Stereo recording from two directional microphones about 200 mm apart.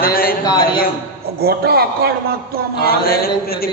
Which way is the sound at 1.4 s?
50° right (ahead or behind).